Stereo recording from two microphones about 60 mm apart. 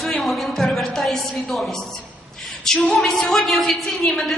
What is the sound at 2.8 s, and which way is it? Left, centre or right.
A woman's voice, centre.